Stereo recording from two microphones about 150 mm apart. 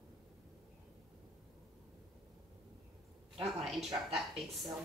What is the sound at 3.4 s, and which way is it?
A woman's voice, centre (ahead or behind).